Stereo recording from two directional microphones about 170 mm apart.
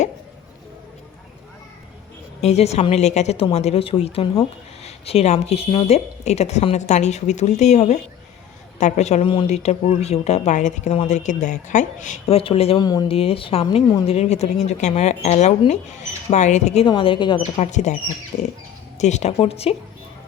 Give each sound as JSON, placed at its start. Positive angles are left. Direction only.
{"t": 2.4, "sound": "a woman's voice", "side_deg": 40}
{"t": 12.8, "sound": "speech", "side_deg": 20}
{"t": 13.1, "sound": "a woman's voice", "side_deg": 35}
{"t": 16.8, "sound": "speech", "side_deg": 30}
{"t": 17.4, "sound": "a woman's voice", "side_deg": 45}